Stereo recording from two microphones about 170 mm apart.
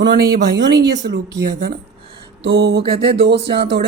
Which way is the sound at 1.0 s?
85° right.